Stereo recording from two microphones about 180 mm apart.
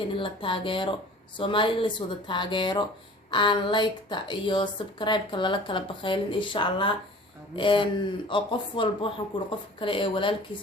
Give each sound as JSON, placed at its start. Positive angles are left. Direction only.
{"t": 0.1, "sound": "a woman's voice", "side_deg": 30}